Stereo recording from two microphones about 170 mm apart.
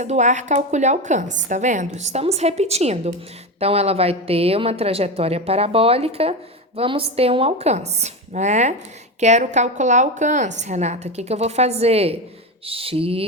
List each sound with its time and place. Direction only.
0.0 s a woman's voice: 45° right (ahead or behind)